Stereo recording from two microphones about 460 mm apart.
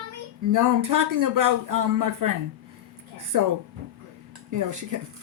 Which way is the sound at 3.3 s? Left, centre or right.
Right.